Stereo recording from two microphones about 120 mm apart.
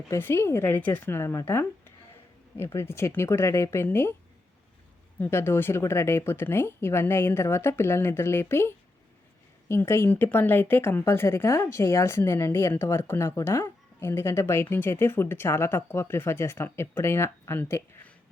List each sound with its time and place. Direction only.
0.1 s speech: 20° left (ahead or behind)
5.2 s speech: 20° left (ahead or behind)